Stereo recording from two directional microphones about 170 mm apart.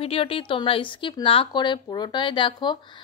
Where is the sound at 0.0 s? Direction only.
35° left (ahead or behind).